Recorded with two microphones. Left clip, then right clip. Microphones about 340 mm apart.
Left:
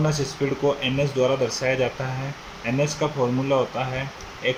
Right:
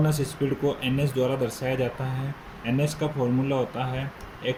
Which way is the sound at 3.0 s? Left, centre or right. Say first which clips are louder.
Left 3 dB; left.